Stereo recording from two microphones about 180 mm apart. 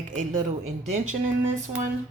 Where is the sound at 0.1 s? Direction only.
45° right (ahead or behind).